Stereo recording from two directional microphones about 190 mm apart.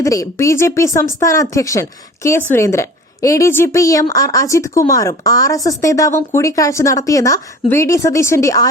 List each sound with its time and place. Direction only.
0.0 s a woman's voice: 15° left (ahead or behind)